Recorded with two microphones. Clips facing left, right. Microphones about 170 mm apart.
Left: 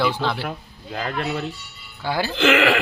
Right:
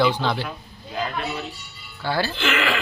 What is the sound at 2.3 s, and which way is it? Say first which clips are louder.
Speech: left 6 dB; 85° left.